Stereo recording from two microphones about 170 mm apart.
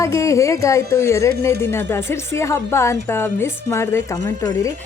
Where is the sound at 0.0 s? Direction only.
20° left (ahead or behind).